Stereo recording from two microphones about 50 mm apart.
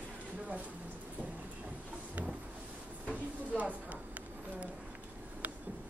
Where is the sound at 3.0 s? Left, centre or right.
Right.